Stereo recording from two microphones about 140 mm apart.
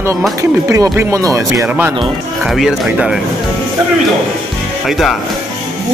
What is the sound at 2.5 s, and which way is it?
Speech, 5° right (ahead or behind).